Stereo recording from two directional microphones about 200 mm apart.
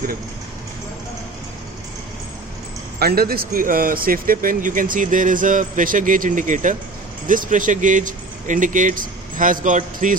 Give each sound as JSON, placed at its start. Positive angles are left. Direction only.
{"t": 3.0, "sound": "a man's voice", "side_deg": -50}